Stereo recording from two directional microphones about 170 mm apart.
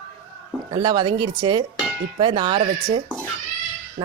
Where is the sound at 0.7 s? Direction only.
25° right (ahead or behind).